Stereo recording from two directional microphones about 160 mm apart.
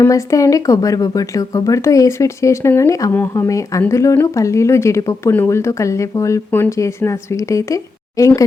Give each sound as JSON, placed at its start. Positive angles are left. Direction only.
{"t": 0.0, "sound": "speech", "side_deg": 20}